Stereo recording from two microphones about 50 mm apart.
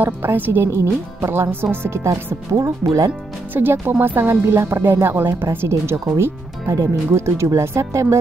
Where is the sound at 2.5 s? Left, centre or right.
Right.